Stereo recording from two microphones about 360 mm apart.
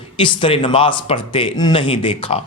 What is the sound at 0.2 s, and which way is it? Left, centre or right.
Speech, centre.